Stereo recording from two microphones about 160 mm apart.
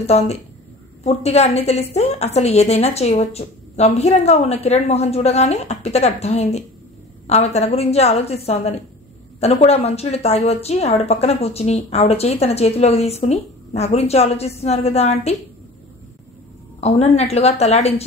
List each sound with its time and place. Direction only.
0.0 s a woman's voice: 40° left (ahead or behind)
16.8 s a woman's voice: 40° left (ahead or behind)